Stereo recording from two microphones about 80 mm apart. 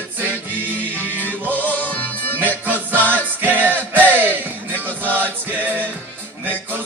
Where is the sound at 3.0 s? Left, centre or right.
Right.